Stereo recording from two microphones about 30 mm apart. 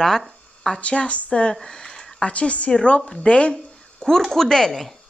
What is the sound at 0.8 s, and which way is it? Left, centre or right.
Speech, left.